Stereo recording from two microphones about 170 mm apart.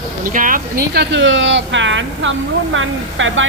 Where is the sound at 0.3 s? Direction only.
55° right (ahead or behind).